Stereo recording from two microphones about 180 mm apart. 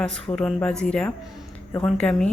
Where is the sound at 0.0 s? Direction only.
5° left (ahead or behind).